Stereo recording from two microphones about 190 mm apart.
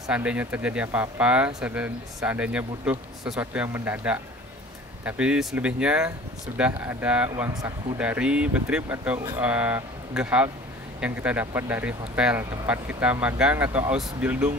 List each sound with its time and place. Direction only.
0.1 s speech: 5° right (ahead or behind)